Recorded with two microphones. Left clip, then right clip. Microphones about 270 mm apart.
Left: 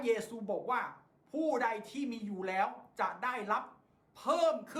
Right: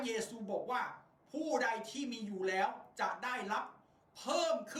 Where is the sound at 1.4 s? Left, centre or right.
Left.